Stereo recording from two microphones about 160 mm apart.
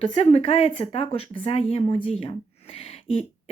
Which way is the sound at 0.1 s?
40° left (ahead or behind).